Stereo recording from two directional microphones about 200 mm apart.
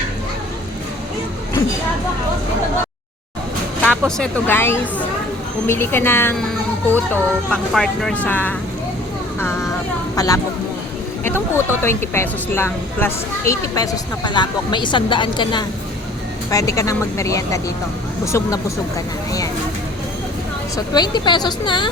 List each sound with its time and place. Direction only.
3.8 s speech: 5° left (ahead or behind)
10.2 s speech: 15° left (ahead or behind)
20.7 s speech: 20° left (ahead or behind)